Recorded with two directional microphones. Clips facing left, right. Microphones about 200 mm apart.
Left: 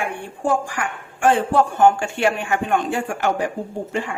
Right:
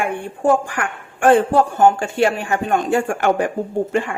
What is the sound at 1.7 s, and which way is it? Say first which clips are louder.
Speech: right 1 dB; 35° right (ahead or behind).